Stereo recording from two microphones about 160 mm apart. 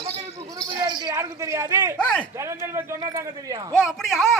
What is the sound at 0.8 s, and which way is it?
A man's voice, 25° right (ahead or behind).